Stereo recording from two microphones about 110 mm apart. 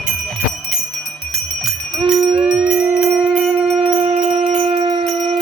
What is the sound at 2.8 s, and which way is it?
Wind instrument, 20° right (ahead or behind).